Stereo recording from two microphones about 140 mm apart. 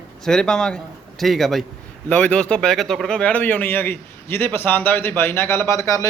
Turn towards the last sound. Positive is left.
turn(degrees=25)  # may be behind; listen again after turning